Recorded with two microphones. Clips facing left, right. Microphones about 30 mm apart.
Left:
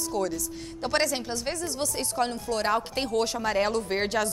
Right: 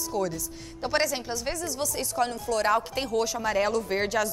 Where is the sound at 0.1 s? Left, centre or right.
Left.